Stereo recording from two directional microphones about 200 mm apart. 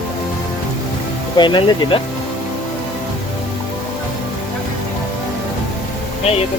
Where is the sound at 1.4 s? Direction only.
25° left (ahead or behind).